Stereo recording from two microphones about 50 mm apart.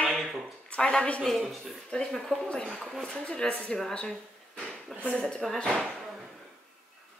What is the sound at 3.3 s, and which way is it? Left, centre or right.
Speech, left.